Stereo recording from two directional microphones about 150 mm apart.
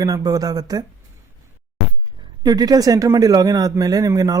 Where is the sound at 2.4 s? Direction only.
25° right (ahead or behind).